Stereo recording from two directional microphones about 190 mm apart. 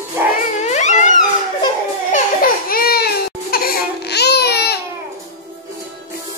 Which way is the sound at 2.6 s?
50° left (ahead or behind).